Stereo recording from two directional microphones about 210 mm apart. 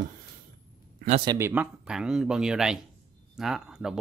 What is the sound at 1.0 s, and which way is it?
Speech, 25° right (ahead or behind).